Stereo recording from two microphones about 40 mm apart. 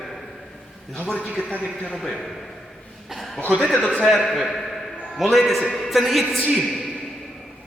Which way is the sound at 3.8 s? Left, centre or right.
Left.